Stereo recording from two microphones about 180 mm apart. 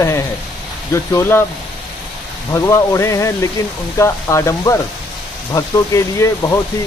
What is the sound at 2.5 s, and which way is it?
Speech, 15° left (ahead or behind).